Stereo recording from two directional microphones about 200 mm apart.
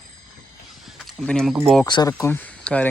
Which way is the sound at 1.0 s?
Centre (ahead or behind).